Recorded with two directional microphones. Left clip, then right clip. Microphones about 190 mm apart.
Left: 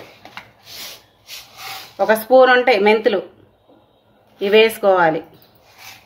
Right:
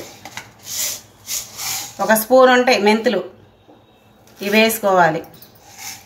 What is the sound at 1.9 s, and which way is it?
Speech, 50° left (ahead or behind).